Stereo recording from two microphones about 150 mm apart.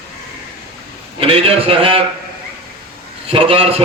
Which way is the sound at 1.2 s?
40° right (ahead or behind).